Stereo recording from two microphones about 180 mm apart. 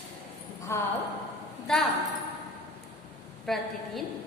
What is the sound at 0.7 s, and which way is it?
Speech, 15° left (ahead or behind).